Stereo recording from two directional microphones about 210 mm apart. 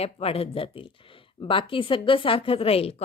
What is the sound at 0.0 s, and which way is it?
Speech, 30° left (ahead or behind).